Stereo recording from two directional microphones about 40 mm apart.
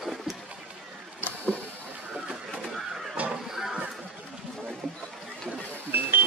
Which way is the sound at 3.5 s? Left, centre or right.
Centre.